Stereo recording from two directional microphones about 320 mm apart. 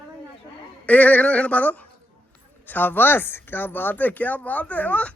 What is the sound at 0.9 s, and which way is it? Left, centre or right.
Speech, centre.